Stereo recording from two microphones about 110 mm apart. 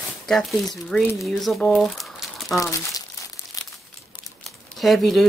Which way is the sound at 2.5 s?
30° left (ahead or behind).